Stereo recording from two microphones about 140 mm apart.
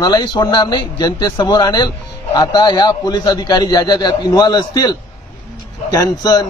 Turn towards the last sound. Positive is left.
turn(degrees=25)  # may be behind; listen again after turning